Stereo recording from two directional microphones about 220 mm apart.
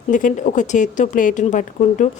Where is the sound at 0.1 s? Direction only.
35° left (ahead or behind).